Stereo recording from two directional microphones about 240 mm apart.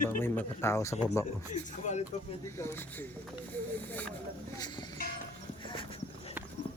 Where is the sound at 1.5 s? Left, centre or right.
Left.